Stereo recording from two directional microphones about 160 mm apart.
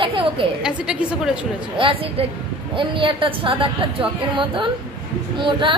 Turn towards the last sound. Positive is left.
turn(degrees=-30)  # may be behind; listen again after turning